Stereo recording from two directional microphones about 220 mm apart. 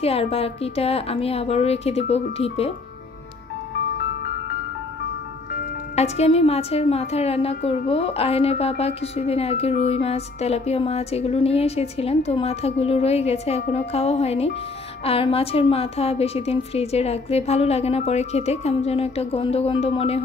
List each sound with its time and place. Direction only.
0.0 s a woman's voice: 25° left (ahead or behind)
5.9 s a woman's voice: 30° left (ahead or behind)